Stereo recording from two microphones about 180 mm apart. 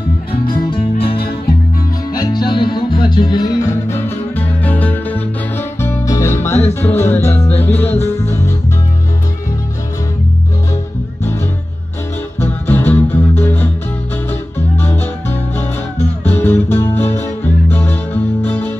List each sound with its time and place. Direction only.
0.3 s music: 25° left (ahead or behind)
12.4 s music: 10° left (ahead or behind)
14.8 s music: 10° left (ahead or behind)